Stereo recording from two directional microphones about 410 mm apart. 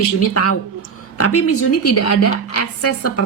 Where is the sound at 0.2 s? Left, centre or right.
Left.